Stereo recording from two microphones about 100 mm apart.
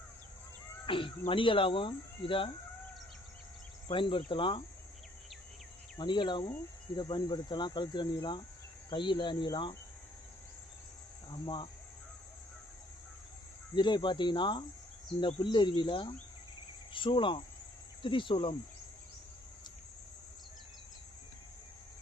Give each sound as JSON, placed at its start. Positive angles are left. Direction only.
{"t": 0.9, "sound": "speech", "side_deg": 60}
{"t": 3.8, "sound": "speech", "side_deg": 55}
{"t": 6.0, "sound": "speech", "side_deg": 50}
{"t": 11.3, "sound": "speech", "side_deg": 55}
{"t": 13.7, "sound": "speech", "side_deg": 50}